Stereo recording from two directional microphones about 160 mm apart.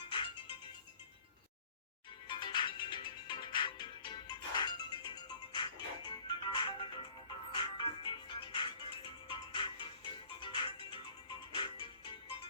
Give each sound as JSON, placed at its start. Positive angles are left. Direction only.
{"t": 0.1, "sound": "music", "side_deg": 30}
{"t": 2.2, "sound": "music", "side_deg": 30}